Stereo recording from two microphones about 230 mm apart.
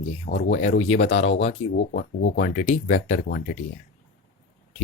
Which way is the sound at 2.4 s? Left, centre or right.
Left.